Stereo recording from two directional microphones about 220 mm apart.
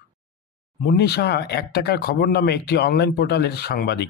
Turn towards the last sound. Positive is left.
turn(degrees=50)  # may be behind; listen again after turning